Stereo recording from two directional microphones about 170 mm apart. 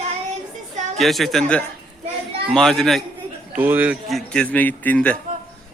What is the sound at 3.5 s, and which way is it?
Speech, 10° right (ahead or behind).